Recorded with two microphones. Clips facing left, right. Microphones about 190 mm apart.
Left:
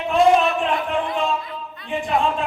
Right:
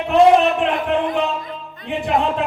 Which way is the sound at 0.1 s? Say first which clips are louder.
Right 4 dB; 65° right (ahead or behind).